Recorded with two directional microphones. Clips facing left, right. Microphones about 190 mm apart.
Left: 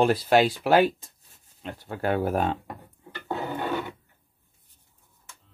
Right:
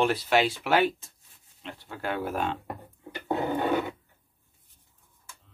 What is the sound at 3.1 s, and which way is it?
Filing, 15° right (ahead or behind).